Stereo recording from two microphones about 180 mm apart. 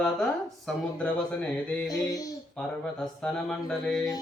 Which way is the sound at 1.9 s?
20° left (ahead or behind).